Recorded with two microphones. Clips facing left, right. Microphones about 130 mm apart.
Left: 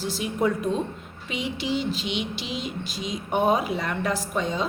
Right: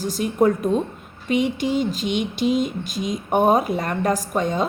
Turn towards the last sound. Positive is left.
turn(degrees=-50)  # may be behind; listen again after turning